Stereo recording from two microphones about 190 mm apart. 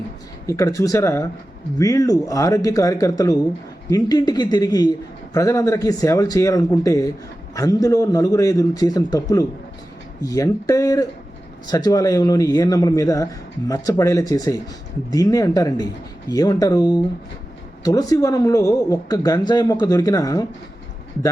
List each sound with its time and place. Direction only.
0.4 s a man's voice: 15° left (ahead or behind)